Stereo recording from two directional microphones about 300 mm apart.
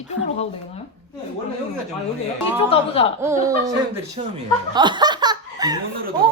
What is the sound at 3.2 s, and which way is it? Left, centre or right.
Music, centre.